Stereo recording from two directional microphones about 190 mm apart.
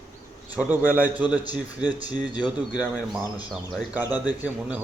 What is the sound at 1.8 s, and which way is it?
Speech, 20° left (ahead or behind).